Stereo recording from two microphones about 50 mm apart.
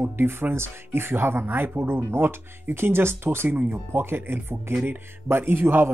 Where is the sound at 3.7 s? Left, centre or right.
Right.